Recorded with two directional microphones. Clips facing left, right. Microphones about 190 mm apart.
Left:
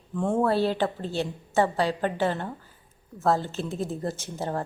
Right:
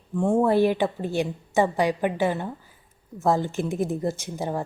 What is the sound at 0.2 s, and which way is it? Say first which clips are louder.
A woman's voice: right 4 dB; 15° right (ahead or behind).